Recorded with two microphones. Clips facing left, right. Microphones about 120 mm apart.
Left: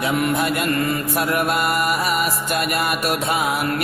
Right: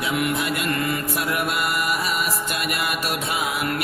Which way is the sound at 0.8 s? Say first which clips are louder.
Left 3 dB; 30° left (ahead or behind).